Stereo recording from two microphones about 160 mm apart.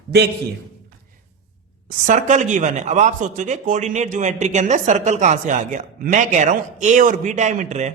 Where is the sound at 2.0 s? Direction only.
50° right (ahead or behind).